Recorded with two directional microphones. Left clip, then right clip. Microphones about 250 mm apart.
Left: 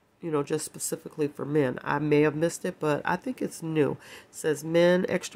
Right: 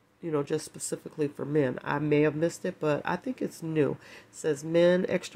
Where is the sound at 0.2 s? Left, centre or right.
Centre.